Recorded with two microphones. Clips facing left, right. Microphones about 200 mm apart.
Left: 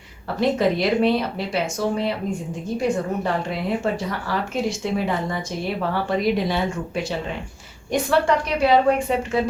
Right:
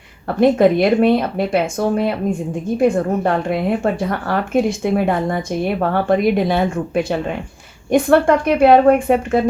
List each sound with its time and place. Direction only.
0.3 s speech: 55° right (ahead or behind)